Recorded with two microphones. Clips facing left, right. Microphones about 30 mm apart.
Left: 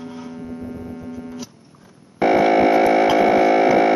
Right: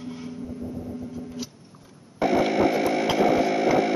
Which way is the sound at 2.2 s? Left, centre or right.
Left.